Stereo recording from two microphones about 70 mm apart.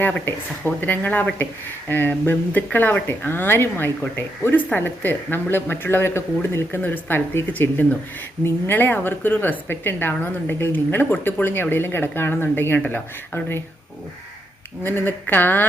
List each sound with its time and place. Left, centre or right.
0.0 s a woman's voice: left
14.8 s a woman's voice: left